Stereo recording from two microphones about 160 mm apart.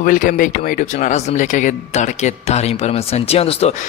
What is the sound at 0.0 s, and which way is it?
Speech, 55° left (ahead or behind).